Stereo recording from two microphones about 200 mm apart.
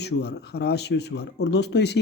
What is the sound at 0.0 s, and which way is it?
Speech, 55° left (ahead or behind).